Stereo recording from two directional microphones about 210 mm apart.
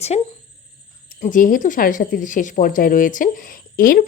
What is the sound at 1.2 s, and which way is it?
A woman's voice, 40° left (ahead or behind).